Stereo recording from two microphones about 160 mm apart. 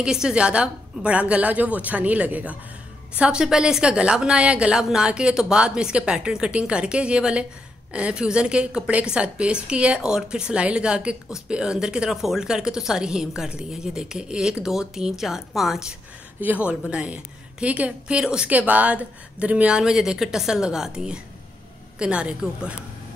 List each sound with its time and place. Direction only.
0.0 s a woman's voice: 5° right (ahead or behind)